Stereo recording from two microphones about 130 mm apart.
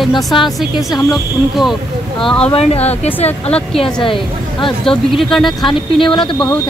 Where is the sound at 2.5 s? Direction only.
50° left (ahead or behind).